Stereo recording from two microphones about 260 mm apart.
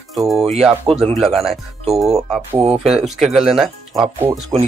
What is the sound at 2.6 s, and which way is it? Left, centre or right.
Speech, right.